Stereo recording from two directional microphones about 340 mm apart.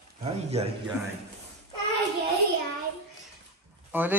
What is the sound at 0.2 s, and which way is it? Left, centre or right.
Speech, centre.